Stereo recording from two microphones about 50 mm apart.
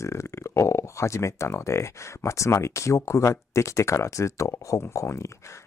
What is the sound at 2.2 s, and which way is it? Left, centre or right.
Speech, left.